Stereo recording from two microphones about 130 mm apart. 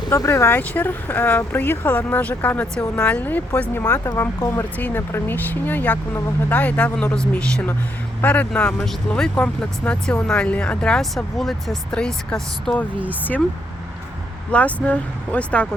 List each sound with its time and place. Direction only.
0.1 s speech: 20° left (ahead or behind)
3.8 s speech: 25° left (ahead or behind); by 12.8 s 5° left (ahead or behind)
14.5 s speech: 10° left (ahead or behind)